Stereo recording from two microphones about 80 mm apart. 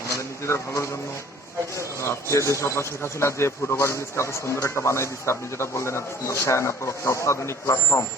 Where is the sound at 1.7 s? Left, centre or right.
Left.